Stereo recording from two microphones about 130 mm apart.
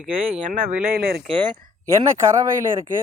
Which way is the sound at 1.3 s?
45° right (ahead or behind).